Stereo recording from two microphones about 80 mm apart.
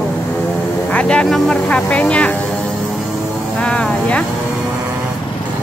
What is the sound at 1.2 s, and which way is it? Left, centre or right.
Speech, centre.